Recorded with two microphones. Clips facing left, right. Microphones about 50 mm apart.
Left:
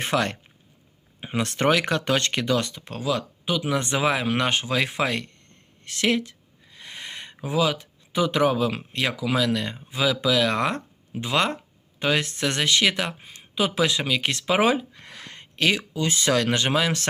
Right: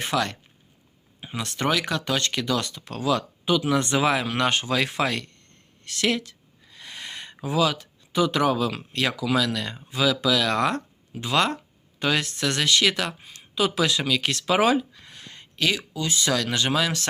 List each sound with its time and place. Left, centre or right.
0.0 s speech: left
2.6 s speech: centre
3.0 s speech: centre
5.8 s a sound: centre
7.4 s speech: centre
15.4 s a sound: left
15.9 s speech: left